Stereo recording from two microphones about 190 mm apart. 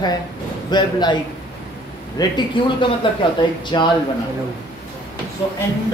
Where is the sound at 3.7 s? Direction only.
25° left (ahead or behind).